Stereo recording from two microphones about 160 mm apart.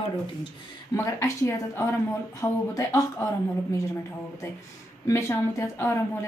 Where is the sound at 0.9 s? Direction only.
20° left (ahead or behind).